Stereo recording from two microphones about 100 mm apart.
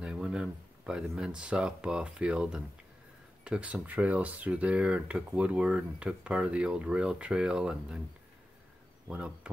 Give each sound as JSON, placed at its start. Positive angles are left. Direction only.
{"t": 0.0, "sound": "speech", "side_deg": -10}
{"t": 9.1, "sound": "speech", "side_deg": -10}